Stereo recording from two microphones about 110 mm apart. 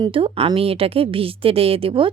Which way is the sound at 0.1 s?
55° right (ahead or behind).